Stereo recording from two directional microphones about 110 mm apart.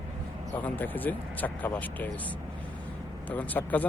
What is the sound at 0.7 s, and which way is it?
Speech, 15° left (ahead or behind).